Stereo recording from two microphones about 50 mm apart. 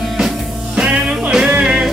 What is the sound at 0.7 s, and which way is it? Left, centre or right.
Music, centre.